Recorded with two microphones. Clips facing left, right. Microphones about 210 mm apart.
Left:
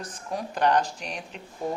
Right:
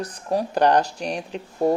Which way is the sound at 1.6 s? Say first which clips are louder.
Right 10 dB; 70° right (ahead or behind).